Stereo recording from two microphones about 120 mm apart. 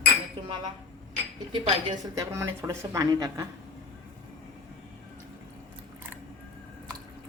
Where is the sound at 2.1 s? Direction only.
20° right (ahead or behind).